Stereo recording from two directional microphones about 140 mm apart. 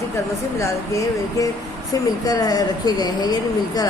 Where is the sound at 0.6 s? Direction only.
25° left (ahead or behind).